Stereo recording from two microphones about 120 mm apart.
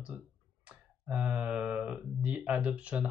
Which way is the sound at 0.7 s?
10° right (ahead or behind).